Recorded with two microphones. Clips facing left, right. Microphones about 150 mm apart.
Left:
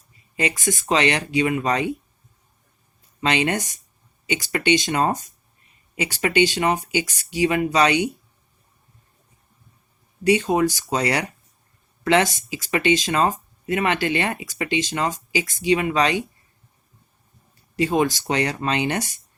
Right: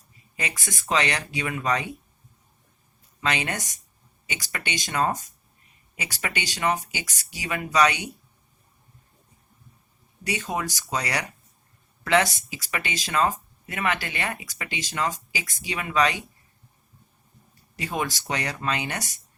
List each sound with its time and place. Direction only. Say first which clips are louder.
0.3 s speech: left 10 dB; 25° left (ahead or behind)
3.2 s speech: left 6 dB; 25° left (ahead or behind)
10.2 s speech: left 11 dB; 25° left (ahead or behind)
17.7 s speech: left 9 dB; 25° left (ahead or behind)